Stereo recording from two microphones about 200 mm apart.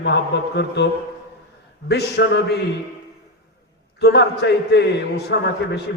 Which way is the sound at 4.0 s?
55° left (ahead or behind).